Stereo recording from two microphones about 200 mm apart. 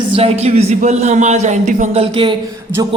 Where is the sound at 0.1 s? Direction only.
30° right (ahead or behind).